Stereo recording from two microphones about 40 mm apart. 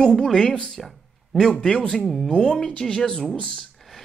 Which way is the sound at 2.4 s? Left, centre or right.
Left.